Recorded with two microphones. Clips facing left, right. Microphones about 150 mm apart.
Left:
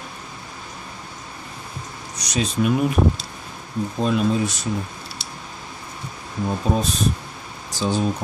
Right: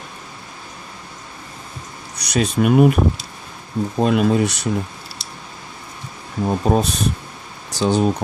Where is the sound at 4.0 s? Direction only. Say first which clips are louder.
Right 4 dB; 60° right (ahead or behind).